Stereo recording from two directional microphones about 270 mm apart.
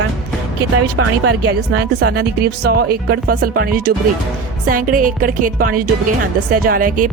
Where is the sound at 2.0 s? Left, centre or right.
Right.